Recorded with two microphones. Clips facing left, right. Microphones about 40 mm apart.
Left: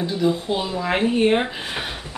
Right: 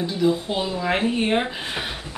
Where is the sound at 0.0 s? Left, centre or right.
Centre.